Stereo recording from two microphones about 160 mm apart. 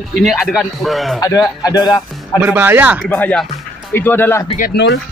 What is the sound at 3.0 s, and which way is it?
Speech, 10° left (ahead or behind).